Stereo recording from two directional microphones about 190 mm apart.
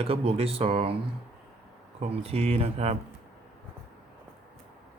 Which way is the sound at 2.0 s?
35° right (ahead or behind).